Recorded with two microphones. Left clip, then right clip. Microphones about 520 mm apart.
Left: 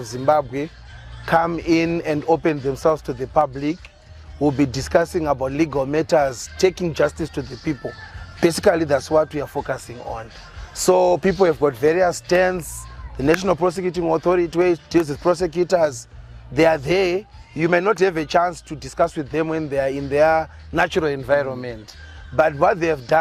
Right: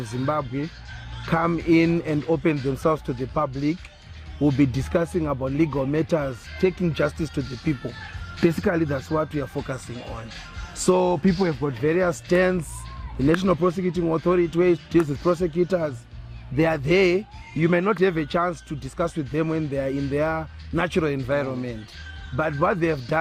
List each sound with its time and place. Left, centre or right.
0.0 s speech: left
7.3 s speech: left
8.4 s speech: left